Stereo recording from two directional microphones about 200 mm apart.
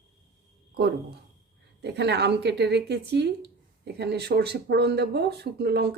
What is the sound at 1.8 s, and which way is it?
Speech, 55° right (ahead or behind).